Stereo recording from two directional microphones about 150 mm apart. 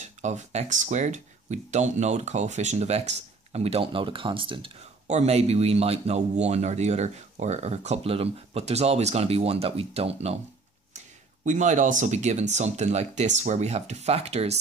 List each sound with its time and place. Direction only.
0.0 s a man's voice: 50° right (ahead or behind); by 4.7 s 35° right (ahead or behind)
5.0 s a man's voice: 45° right (ahead or behind)
11.4 s a man's voice: 55° right (ahead or behind)